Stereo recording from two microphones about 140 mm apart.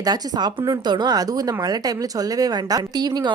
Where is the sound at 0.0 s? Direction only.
30° right (ahead or behind).